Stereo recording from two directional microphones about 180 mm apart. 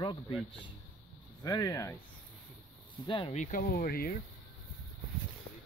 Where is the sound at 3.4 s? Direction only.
50° left (ahead or behind).